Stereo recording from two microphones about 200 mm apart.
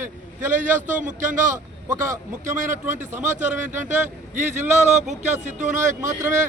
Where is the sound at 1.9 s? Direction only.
15° right (ahead or behind).